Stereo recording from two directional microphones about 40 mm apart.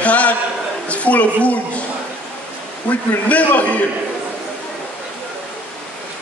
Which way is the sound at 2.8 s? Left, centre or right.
Left.